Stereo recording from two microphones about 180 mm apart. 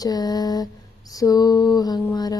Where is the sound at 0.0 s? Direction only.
20° left (ahead or behind).